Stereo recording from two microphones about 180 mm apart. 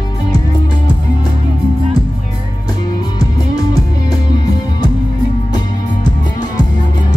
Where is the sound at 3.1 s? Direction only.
20° left (ahead or behind).